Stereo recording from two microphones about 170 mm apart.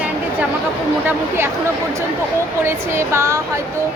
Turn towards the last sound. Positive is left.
turn(degrees=-15)  # may be behind; listen again after turning